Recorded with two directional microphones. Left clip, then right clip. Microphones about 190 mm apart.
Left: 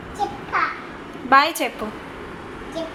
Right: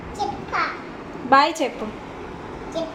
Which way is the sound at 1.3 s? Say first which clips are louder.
Left 1 dB; centre (ahead or behind).